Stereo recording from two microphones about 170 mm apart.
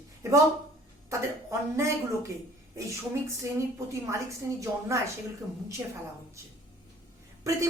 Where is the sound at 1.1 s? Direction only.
20° right (ahead or behind).